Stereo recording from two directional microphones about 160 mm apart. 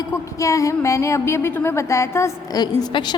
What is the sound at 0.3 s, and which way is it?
A woman's voice, 20° left (ahead or behind).